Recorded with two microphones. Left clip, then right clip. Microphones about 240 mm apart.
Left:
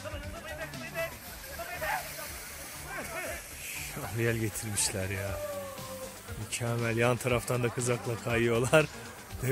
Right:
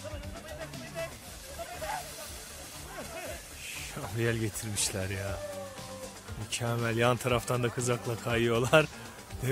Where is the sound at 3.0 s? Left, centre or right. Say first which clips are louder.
Left 3 dB; centre.